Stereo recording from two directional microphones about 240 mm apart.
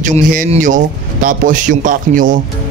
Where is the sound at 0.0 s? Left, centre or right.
Right.